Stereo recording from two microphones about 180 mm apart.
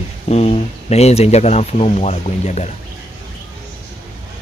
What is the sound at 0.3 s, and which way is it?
A man's voice, 35° left (ahead or behind).